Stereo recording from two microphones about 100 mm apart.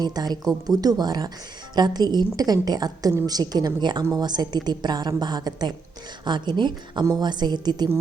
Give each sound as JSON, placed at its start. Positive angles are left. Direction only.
{"t": 0.0, "sound": "a woman's voice", "side_deg": -40}